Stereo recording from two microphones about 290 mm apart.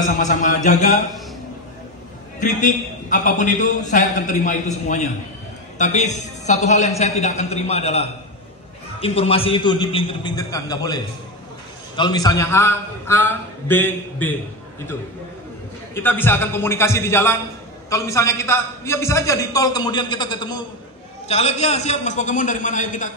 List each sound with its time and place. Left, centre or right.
0.0 s a man's voice: left
2.4 s a man's voice: left
12.0 s a man's voice: centre
15.9 s a man's voice: centre; by 23.1 s left